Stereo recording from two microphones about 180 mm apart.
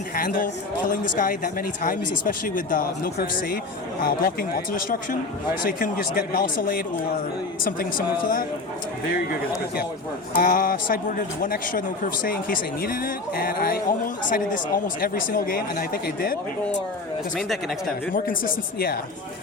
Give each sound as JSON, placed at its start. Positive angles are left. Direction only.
{"t": 0.2, "sound": "speech", "side_deg": 50}
{"t": 10.3, "sound": "speech", "side_deg": 50}
{"t": 17.3, "sound": "speech", "side_deg": 0}
{"t": 18.1, "sound": "speech", "side_deg": 50}